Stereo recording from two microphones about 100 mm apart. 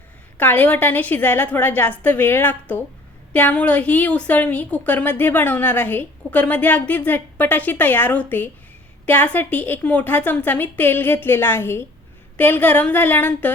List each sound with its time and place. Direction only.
0.3 s a woman's voice: 15° left (ahead or behind)